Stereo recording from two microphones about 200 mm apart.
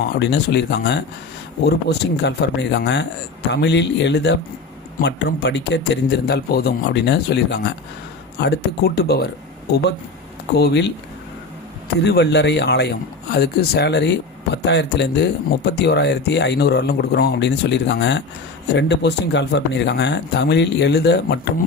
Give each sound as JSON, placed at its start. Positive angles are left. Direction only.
{"t": 0.0, "sound": "speech", "side_deg": 60}
{"t": 10.6, "sound": "speech", "side_deg": 55}
{"t": 12.0, "sound": "speech", "side_deg": 55}